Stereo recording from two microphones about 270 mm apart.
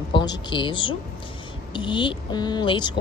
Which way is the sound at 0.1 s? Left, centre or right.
Centre.